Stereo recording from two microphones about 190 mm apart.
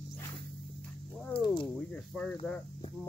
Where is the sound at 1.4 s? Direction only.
25° left (ahead or behind).